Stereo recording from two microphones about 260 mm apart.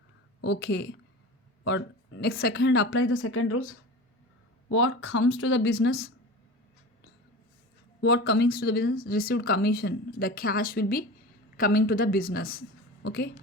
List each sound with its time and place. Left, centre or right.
0.4 s a woman's voice: left
8.0 s a woman's voice: left